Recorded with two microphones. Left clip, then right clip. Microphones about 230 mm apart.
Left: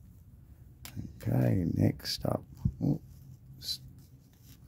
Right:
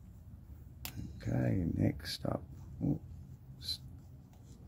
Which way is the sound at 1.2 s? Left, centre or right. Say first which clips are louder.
Left 5 dB; left.